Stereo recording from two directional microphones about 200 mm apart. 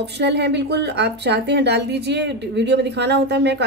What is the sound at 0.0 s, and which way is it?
A woman's voice, 55° right (ahead or behind).